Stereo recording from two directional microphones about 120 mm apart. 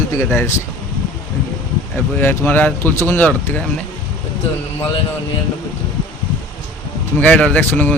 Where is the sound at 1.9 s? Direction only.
20° left (ahead or behind).